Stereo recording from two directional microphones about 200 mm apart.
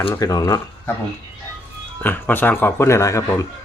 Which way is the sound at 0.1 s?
15° left (ahead or behind).